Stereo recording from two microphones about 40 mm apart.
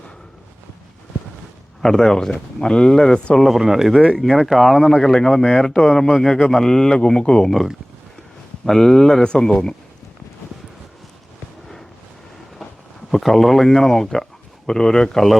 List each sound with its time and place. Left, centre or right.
1.8 s speech: centre
3.4 s speech: centre
8.6 s speech: centre
13.1 s speech: centre